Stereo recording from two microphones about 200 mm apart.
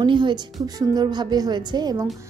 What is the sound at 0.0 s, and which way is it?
A woman's voice, 20° right (ahead or behind).